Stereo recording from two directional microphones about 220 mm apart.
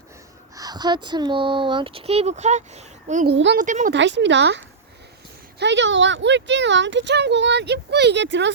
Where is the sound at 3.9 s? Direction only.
55° right (ahead or behind).